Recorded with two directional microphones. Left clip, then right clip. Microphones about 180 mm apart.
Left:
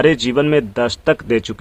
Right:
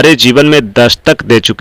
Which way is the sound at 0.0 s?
30° right (ahead or behind).